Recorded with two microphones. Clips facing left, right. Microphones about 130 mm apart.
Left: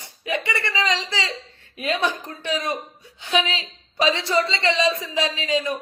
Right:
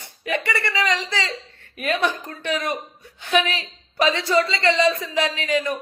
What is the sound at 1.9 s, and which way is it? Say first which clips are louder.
Speech: right 1 dB; 55° right (ahead or behind).